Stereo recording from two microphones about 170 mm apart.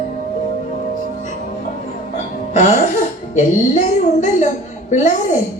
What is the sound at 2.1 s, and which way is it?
Music, 45° left (ahead or behind).